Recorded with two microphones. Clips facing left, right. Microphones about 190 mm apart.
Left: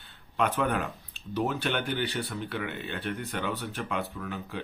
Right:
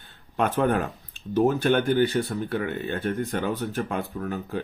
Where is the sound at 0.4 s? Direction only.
45° right (ahead or behind).